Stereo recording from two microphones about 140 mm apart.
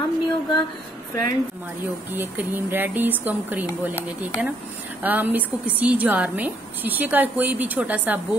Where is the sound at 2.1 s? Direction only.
15° right (ahead or behind).